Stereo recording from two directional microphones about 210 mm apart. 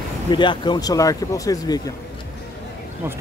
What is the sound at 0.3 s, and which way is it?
Speech, 20° left (ahead or behind).